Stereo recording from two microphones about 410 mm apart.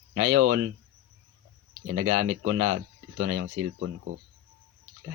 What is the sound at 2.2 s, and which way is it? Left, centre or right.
Speech, right.